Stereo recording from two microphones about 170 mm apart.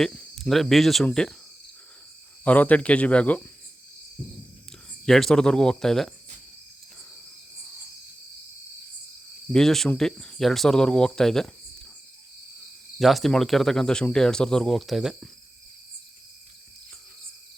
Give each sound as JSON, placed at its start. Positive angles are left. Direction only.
{"t": 0.0, "sound": "speech", "side_deg": 5}
{"t": 2.4, "sound": "speech", "side_deg": 10}
{"t": 5.0, "sound": "speech", "side_deg": 0}
{"t": 9.5, "sound": "speech", "side_deg": 0}
{"t": 13.0, "sound": "speech", "side_deg": 0}